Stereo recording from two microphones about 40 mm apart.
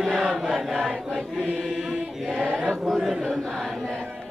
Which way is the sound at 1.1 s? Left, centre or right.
Centre.